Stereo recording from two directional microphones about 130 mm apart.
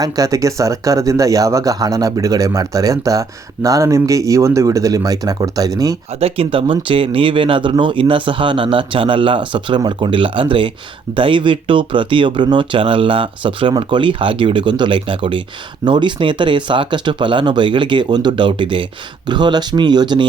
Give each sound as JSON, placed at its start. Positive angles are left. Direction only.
{"t": 0.0, "sound": "speech", "side_deg": -25}
{"t": 6.1, "sound": "speech", "side_deg": -50}